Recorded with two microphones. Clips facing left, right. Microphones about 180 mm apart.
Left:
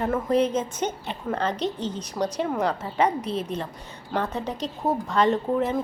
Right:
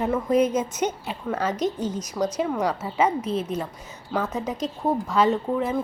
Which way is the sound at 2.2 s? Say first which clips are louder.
Right 1 dB; 10° left (ahead or behind).